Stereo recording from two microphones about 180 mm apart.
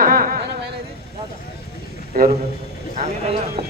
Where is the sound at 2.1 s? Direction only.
60° right (ahead or behind).